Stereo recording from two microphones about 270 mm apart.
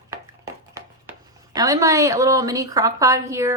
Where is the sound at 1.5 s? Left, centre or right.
Centre.